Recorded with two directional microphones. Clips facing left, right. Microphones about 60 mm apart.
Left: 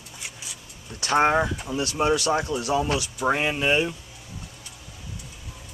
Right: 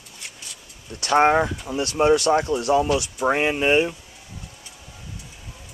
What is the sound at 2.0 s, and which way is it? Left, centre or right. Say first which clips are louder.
Speech: right 5 dB; right.